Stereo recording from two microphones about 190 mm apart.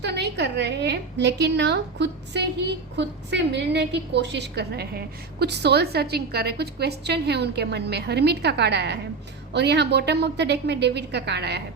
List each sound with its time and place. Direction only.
0.0 s a woman's voice: 60° right (ahead or behind)